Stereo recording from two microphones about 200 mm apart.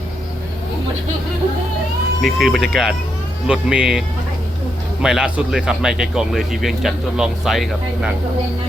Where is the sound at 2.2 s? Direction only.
Centre (ahead or behind).